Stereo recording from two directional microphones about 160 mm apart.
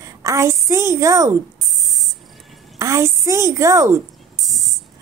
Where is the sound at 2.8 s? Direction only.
20° right (ahead or behind).